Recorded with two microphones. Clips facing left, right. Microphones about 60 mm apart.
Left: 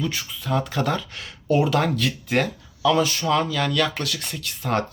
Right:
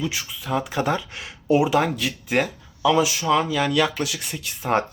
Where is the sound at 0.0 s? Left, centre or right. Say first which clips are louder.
Even; centre.